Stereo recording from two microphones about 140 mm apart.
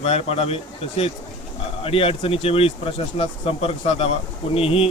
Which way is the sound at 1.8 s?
45° left (ahead or behind).